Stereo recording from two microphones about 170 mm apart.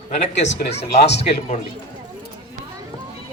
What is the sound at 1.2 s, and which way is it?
Speech, 40° left (ahead or behind).